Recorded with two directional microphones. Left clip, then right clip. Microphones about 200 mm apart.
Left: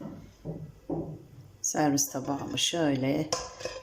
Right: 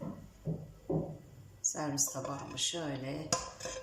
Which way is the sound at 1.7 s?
45° left (ahead or behind).